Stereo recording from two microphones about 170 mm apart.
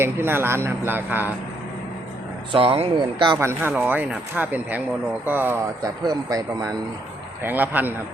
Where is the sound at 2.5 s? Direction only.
30° right (ahead or behind).